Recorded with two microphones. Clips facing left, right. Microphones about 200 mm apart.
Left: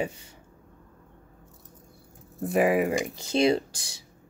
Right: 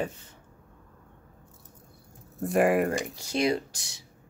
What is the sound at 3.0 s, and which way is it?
Speech, 25° left (ahead or behind).